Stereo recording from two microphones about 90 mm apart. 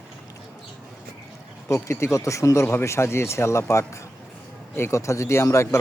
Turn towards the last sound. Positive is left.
turn(degrees=30)  # may be behind; listen again after turning